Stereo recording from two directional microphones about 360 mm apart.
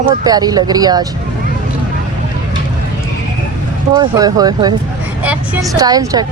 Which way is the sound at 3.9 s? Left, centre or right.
Centre.